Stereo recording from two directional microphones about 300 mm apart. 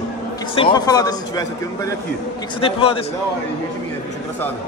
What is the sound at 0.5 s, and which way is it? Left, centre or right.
Speech, centre.